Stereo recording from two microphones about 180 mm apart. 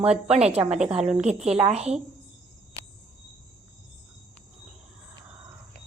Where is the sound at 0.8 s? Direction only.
5° right (ahead or behind).